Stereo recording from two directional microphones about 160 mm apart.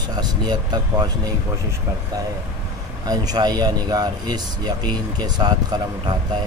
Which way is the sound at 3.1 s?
25° right (ahead or behind).